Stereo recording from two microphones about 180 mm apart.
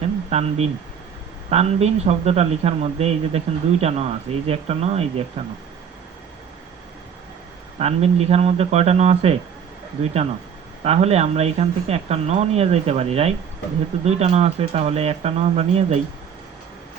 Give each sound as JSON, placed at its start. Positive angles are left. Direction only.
{"t": 0.3, "sound": "speech", "side_deg": -35}
{"t": 7.8, "sound": "speech", "side_deg": -35}
{"t": 10.8, "sound": "speech", "side_deg": -35}